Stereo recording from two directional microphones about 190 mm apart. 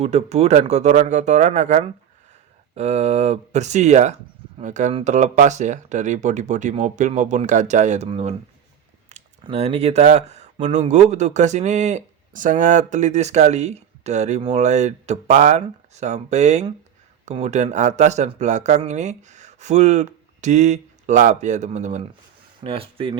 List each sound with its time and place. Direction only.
0.0 s speech: 35° right (ahead or behind)
9.4 s speech: 30° right (ahead or behind)